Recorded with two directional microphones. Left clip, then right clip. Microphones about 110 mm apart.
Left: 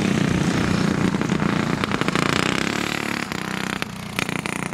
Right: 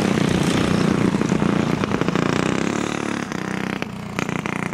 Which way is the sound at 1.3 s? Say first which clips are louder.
Right 2 dB; 50° left (ahead or behind).